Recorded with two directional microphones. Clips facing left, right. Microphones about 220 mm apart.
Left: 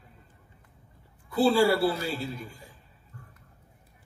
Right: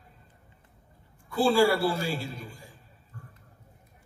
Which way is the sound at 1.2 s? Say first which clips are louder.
Left 1 dB; 25° left (ahead or behind).